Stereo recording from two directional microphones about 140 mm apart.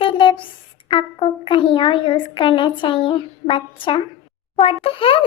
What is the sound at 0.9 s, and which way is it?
A child's voice, 40° left (ahead or behind).